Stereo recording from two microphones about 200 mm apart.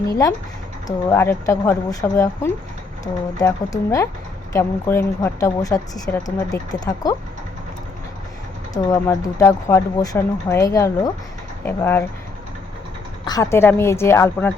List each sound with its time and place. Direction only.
0.1 s speech: 15° left (ahead or behind)
8.7 s speech: 15° left (ahead or behind)
13.2 s speech: 15° left (ahead or behind)